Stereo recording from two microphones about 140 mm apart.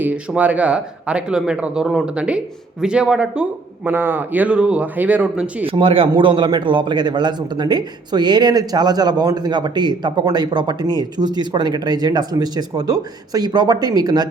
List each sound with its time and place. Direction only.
0.0 s a man's voice: 10° right (ahead or behind)
5.6 s a man's voice: 40° right (ahead or behind)